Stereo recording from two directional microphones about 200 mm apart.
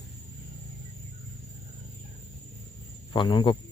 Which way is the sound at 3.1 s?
25° left (ahead or behind).